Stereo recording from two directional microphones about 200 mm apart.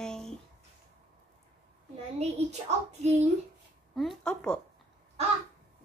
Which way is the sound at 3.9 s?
Centre (ahead or behind).